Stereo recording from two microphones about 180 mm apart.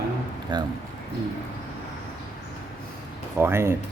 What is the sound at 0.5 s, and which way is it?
Speech, 25° right (ahead or behind).